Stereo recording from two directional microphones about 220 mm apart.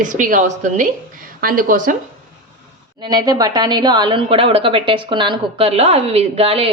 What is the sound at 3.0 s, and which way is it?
A woman's voice, 20° right (ahead or behind).